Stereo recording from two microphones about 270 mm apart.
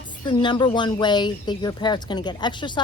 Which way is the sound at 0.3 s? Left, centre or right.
Centre.